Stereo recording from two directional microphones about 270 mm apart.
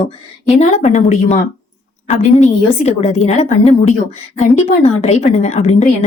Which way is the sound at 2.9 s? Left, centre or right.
Left.